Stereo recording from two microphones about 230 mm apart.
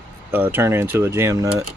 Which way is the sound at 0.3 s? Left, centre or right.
Centre.